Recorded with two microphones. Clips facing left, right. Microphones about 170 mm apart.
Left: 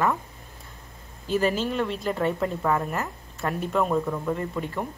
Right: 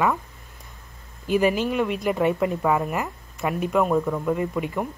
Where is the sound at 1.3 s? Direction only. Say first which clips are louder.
Right 3 dB; 15° right (ahead or behind).